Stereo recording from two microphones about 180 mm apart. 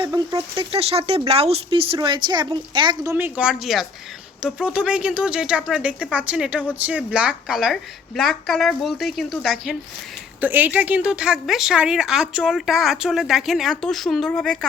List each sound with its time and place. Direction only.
0.0 s a woman's voice: 20° right (ahead or behind); by 14.7 s 5° left (ahead or behind)